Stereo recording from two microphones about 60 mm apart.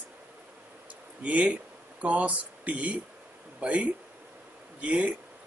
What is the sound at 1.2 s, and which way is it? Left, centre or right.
Speech, right.